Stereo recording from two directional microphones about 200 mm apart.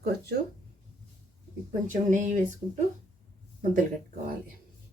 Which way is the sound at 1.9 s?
40° right (ahead or behind).